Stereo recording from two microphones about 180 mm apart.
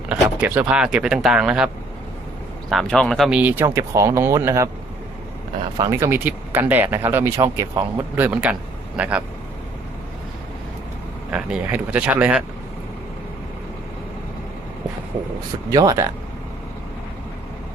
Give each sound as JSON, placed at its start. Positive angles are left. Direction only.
{"t": 0.1, "sound": "speech", "side_deg": -10}
{"t": 5.7, "sound": "speech", "side_deg": -20}
{"t": 11.3, "sound": "speech", "side_deg": -5}
{"t": 15.7, "sound": "speech", "side_deg": -20}